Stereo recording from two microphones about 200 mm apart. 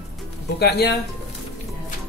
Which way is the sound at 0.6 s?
55° left (ahead or behind).